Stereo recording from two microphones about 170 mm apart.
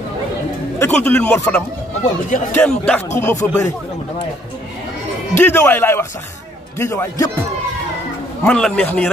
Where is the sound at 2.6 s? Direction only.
10° left (ahead or behind).